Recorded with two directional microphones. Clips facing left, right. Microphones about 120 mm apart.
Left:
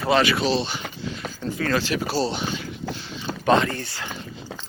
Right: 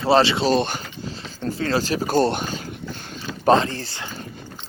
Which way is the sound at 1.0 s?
30° right (ahead or behind).